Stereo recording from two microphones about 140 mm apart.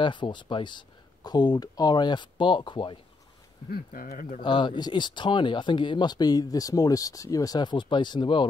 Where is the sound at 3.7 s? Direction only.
90° left.